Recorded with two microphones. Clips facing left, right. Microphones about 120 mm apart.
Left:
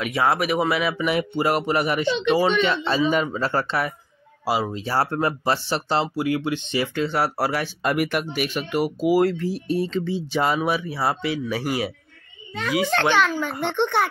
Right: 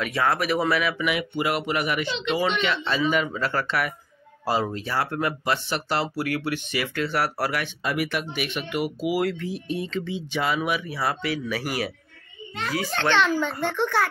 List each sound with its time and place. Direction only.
0.1 s speech: 20° left (ahead or behind)
0.4 s speech: 10° left (ahead or behind)
0.7 s speech: 30° left (ahead or behind)
4.5 s speech: 15° left (ahead or behind)
4.8 s speech: 35° left (ahead or behind)
7.8 s speech: 50° left (ahead or behind); by 11.9 s 25° left (ahead or behind)
13.2 s speech: 10° left (ahead or behind)